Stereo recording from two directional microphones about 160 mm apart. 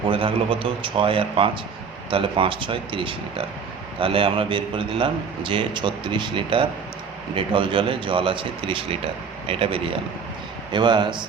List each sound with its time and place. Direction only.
0.1 s a man's voice: 35° right (ahead or behind)